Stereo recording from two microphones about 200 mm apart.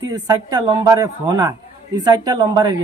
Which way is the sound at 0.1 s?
20° right (ahead or behind).